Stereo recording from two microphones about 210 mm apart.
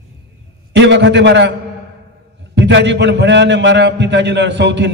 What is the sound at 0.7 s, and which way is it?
Speech, 55° right (ahead or behind).